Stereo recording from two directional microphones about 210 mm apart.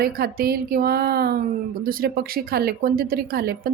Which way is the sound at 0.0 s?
45° right (ahead or behind).